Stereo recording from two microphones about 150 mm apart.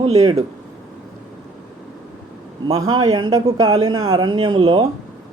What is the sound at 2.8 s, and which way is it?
Speech, 25° right (ahead or behind).